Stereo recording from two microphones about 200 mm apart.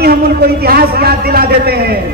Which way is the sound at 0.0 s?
50° right (ahead or behind).